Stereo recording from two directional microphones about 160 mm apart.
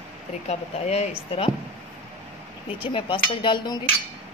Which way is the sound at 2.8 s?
30° left (ahead or behind).